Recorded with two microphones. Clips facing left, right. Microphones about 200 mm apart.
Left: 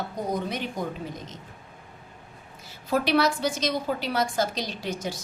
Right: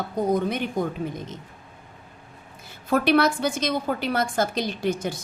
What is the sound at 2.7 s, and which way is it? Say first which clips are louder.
A woman's voice: right 4 dB; 55° right (ahead or behind).